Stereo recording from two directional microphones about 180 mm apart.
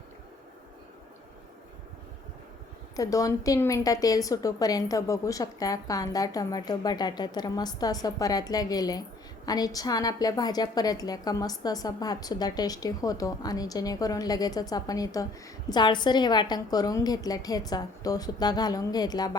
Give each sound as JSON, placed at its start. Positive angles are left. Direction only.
{"t": 2.9, "sound": "a woman's voice", "side_deg": 20}